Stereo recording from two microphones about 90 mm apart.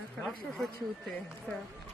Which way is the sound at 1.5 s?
10° left (ahead or behind).